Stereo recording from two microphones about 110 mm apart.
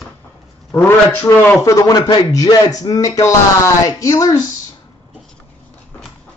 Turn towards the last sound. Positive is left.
turn(degrees=30)  # may be behind; listen again after turning